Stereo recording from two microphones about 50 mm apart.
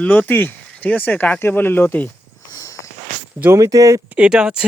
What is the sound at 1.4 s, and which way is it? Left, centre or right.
Speech, left.